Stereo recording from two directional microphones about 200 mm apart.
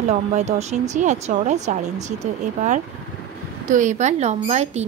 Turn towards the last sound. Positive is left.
turn(degrees=-35)  # may be behind; listen again after turning